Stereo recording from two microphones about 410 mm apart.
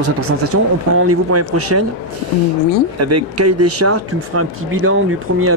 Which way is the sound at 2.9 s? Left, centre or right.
Right.